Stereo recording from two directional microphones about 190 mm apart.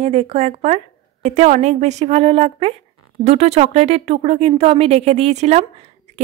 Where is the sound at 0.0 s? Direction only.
35° right (ahead or behind).